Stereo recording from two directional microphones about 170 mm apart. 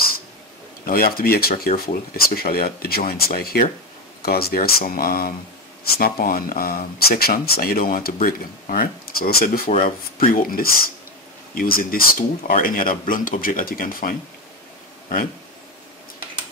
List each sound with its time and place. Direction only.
0.8 s speech: 60° left (ahead or behind)